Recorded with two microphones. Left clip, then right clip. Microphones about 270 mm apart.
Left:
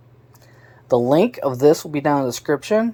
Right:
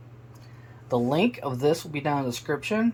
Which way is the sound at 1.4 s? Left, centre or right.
Left.